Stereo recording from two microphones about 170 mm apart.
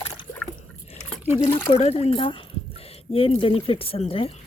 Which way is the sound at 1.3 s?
35° left (ahead or behind).